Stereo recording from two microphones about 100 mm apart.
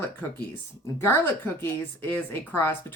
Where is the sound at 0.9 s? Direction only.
20° left (ahead or behind).